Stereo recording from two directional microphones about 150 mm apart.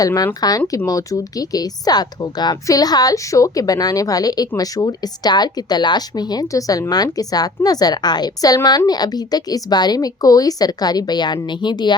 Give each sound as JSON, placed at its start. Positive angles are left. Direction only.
{"t": 0.0, "sound": "speech", "side_deg": 25}